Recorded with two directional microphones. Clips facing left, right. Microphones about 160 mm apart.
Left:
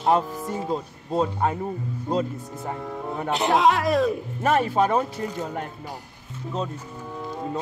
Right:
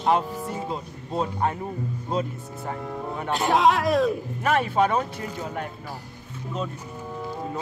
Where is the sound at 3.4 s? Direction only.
Centre (ahead or behind).